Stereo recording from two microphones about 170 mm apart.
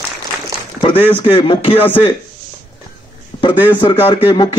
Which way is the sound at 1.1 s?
30° left (ahead or behind).